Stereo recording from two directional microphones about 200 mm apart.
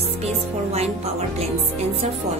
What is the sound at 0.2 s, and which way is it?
Speech, 30° right (ahead or behind).